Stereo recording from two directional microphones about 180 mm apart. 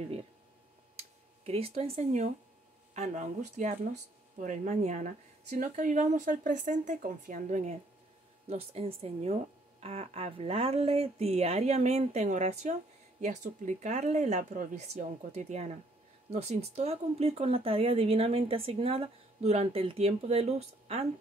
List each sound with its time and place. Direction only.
0.9 s speech: 35° right (ahead or behind)